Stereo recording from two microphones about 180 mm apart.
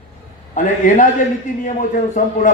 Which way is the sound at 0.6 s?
45° left (ahead or behind).